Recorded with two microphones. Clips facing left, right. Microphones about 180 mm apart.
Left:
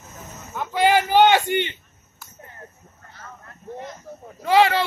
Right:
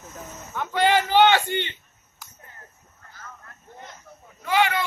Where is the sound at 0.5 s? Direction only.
10° left (ahead or behind).